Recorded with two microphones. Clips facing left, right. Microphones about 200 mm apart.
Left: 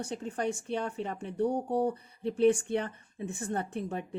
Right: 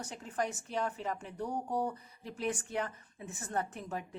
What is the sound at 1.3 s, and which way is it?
Speech, 65° left (ahead or behind).